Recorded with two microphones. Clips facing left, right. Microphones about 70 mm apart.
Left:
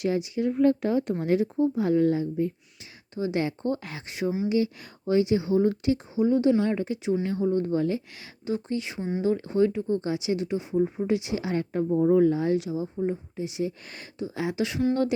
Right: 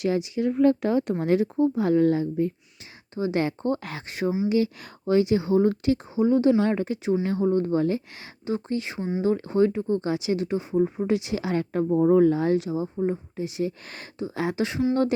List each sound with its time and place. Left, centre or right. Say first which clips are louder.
0.0 s speech: right 2 dB; right
1.2 s speech: right 2 dB; right
3.2 s speech: right 2 dB; right
3.4 s speech: right 2 dB; right
4.4 s speech: right 2 dB; right
9.0 s speech: right 2 dB; centre
9.2 s speech: right 2 dB; right
10.8 s speech: right 2 dB; right
12.5 s speech: right 2 dB; right